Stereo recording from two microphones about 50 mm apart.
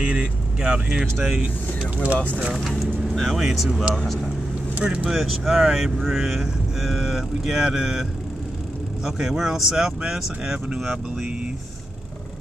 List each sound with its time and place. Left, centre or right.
0.0 s speech: centre
2.1 s speech: left
3.2 s speech: centre
4.7 s speech: right; by 11.2 s centre